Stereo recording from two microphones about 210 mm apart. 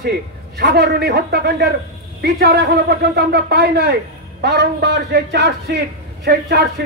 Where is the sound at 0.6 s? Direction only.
50° right (ahead or behind).